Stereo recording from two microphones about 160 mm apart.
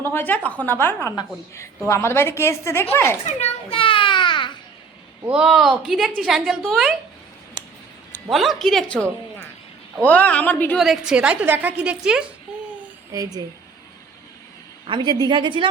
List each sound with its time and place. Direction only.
0.0 s a woman's voice: 15° left (ahead or behind)
3.3 s a sound: 40° left (ahead or behind)
5.3 s a woman's voice: centre (ahead or behind)
8.3 s a woman's voice: centre (ahead or behind)
10.8 s a woman's voice: centre (ahead or behind)
13.1 s a woman's voice: 20° right (ahead or behind)
14.8 s a woman's voice: 30° right (ahead or behind)